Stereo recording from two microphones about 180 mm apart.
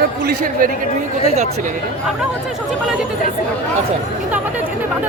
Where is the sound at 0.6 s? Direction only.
50° right (ahead or behind).